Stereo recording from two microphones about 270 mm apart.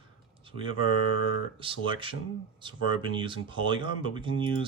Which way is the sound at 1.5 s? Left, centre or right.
Centre.